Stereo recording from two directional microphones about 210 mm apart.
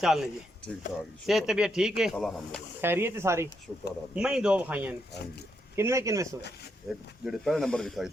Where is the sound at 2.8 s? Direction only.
10° right (ahead or behind).